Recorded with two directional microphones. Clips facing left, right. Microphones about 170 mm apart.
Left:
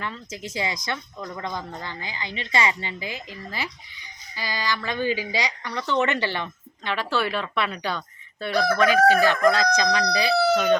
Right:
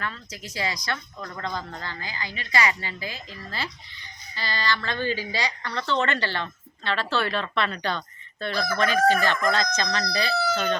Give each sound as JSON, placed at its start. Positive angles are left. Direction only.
{"t": 0.0, "sound": "a woman's voice", "side_deg": 20}
{"t": 8.5, "sound": "chicken", "side_deg": 65}
{"t": 9.0, "sound": "a woman's voice", "side_deg": 10}